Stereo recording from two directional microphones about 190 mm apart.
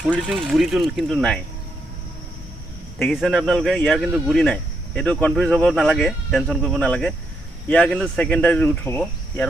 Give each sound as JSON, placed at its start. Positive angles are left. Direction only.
{"t": 0.0, "sound": "speech", "side_deg": -5}
{"t": 3.0, "sound": "speech", "side_deg": 0}